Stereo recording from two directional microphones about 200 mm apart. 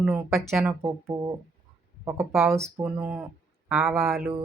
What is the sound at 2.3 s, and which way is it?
Speech, centre (ahead or behind).